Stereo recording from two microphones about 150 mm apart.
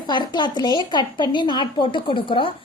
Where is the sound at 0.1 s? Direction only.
30° left (ahead or behind).